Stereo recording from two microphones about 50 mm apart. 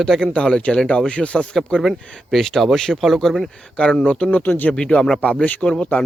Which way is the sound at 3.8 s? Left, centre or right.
Centre.